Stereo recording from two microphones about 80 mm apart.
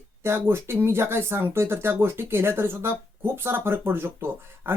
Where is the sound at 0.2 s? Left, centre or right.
Right.